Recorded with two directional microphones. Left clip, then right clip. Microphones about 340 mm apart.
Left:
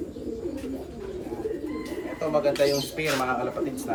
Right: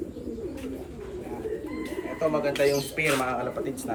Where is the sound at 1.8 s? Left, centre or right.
Centre.